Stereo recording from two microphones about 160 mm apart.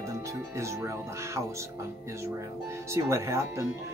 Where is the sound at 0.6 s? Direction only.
20° right (ahead or behind).